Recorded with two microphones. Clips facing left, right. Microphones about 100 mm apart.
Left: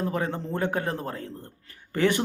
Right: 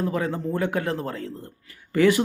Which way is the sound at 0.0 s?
25° left (ahead or behind).